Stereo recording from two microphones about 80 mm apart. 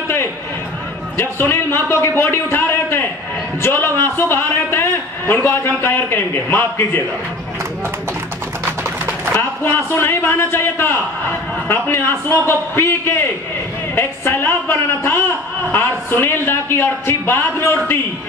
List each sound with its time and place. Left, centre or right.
1.1 s a man's voice: left
9.4 s a man's voice: left